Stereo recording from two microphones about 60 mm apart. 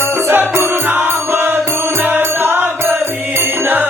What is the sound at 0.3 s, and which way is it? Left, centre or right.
Music, right.